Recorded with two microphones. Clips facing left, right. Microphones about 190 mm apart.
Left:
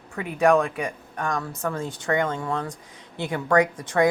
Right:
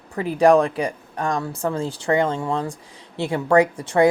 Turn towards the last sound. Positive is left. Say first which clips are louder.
# right 4 dB
turn(degrees=-30)  # may be behind; listen again after turning